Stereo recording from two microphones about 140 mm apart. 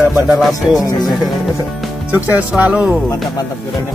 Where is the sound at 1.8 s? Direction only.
Centre (ahead or behind).